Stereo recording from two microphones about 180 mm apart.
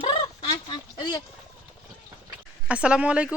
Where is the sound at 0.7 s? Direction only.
25° left (ahead or behind).